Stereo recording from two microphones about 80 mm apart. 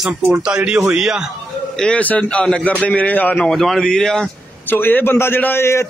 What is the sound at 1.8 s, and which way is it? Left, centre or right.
A man's voice, centre.